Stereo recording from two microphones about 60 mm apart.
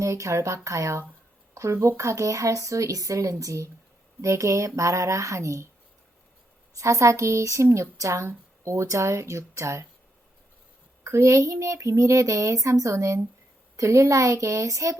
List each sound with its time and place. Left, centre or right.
0.0 s a woman's voice: right
6.7 s a woman's voice: right
11.0 s a child's voice: right
13.7 s a woman's voice: right